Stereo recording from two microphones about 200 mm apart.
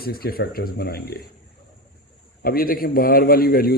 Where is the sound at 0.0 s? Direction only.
50° left (ahead or behind).